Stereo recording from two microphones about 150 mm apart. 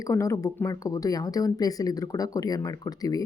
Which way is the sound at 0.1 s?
20° left (ahead or behind).